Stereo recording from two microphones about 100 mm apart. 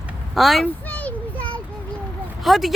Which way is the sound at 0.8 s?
15° left (ahead or behind).